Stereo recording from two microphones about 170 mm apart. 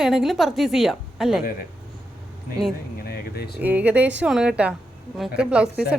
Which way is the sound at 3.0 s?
65° left (ahead or behind).